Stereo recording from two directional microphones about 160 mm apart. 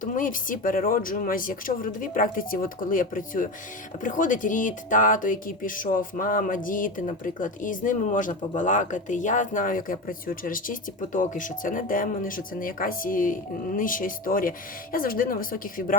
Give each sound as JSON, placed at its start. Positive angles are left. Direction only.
{"t": 0.0, "sound": "speech", "side_deg": 55}